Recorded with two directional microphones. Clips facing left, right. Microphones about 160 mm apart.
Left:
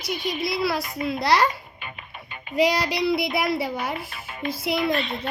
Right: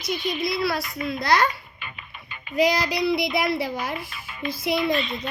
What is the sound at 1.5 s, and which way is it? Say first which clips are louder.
Music: left 2 dB; 40° left (ahead or behind).